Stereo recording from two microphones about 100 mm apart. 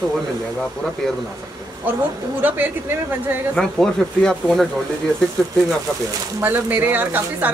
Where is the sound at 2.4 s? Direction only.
20° right (ahead or behind).